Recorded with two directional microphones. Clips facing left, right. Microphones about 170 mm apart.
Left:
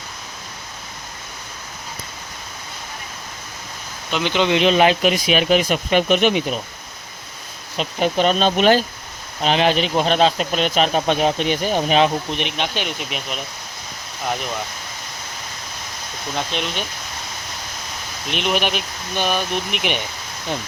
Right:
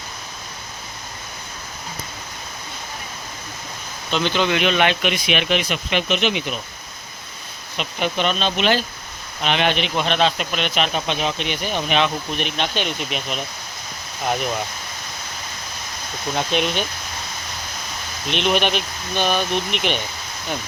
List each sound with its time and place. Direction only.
4.1 s speech: 15° left (ahead or behind)
4.6 s speech: 35° left (ahead or behind)
7.8 s speech: 40° left (ahead or behind)
12.3 s speech: 20° left (ahead or behind); by 13.4 s centre (ahead or behind)
16.3 s speech: 5° right (ahead or behind)
18.3 s speech: 5° left (ahead or behind)